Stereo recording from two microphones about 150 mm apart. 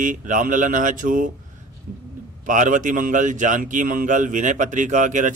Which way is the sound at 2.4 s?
55° right (ahead or behind).